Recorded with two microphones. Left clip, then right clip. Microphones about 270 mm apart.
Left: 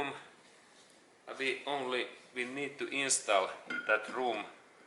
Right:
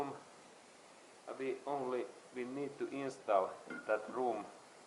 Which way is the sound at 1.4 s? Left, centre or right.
Centre.